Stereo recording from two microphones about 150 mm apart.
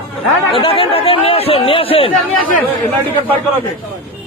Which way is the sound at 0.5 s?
35° left (ahead or behind).